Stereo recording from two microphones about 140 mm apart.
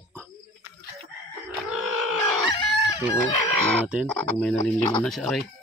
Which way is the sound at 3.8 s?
5° right (ahead or behind).